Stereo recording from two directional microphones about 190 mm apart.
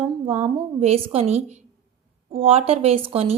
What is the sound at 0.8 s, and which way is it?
A woman's voice, 30° right (ahead or behind).